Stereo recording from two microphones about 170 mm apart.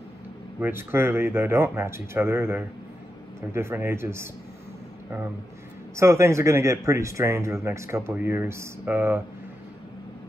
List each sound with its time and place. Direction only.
0.6 s speech: 15° right (ahead or behind)
5.9 s speech: 15° right (ahead or behind)